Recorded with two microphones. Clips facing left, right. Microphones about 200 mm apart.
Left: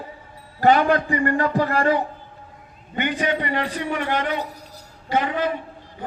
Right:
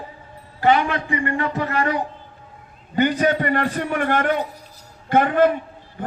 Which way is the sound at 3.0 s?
40° right (ahead or behind).